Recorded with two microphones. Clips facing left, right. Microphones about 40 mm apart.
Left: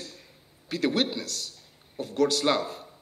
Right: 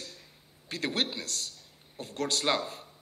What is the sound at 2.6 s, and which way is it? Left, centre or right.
Speech, left.